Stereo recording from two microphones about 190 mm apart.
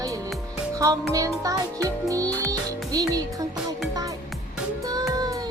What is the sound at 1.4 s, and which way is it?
Speech, 15° right (ahead or behind).